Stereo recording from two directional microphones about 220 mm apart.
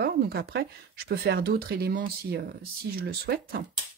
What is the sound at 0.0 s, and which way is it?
Speech, 45° right (ahead or behind).